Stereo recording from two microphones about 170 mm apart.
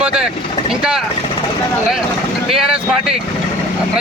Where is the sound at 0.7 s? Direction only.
5° right (ahead or behind).